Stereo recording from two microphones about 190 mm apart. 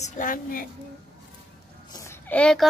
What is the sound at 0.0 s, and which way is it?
Speech, 45° left (ahead or behind).